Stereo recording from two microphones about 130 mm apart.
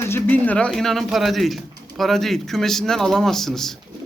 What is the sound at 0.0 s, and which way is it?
A man's voice, 15° left (ahead or behind).